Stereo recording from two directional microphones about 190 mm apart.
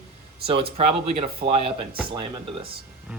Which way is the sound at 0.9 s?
35° right (ahead or behind).